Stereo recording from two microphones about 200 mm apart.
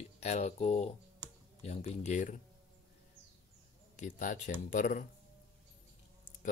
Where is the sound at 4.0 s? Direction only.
40° left (ahead or behind).